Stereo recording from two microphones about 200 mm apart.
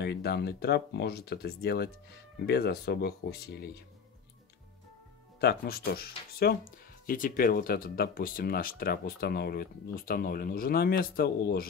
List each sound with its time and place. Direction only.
0.0 s speech: 55° left (ahead or behind)
5.4 s speech: 50° left (ahead or behind)